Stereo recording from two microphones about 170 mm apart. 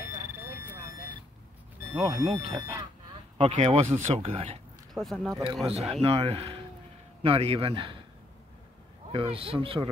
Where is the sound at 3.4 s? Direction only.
40° right (ahead or behind).